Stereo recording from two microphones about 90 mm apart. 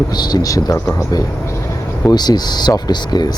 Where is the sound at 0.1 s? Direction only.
50° left (ahead or behind).